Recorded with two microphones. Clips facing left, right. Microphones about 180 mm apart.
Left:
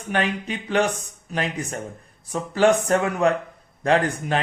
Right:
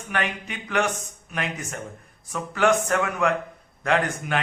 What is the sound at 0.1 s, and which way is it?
Speech, 30° left (ahead or behind).